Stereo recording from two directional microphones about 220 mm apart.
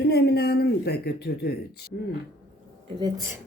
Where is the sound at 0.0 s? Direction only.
45° left (ahead or behind).